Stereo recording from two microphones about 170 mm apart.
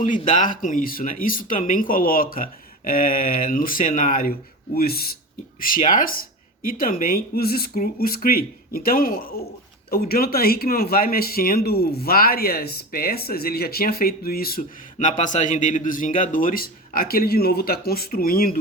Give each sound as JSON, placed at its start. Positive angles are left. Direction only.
{"t": 0.0, "sound": "speech", "side_deg": 50}
{"t": 14.9, "sound": "speech", "side_deg": 45}